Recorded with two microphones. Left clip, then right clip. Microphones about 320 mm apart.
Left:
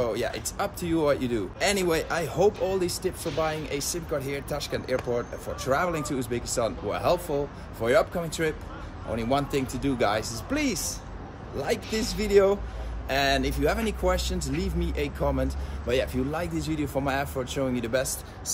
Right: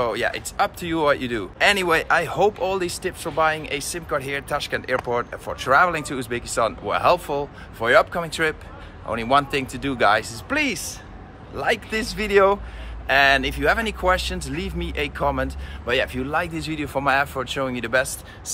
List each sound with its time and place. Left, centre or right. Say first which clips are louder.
0.0 s speech: right 5 dB; centre
12.0 s speech: right 4 dB; right
13.1 s speech: right 8 dB; centre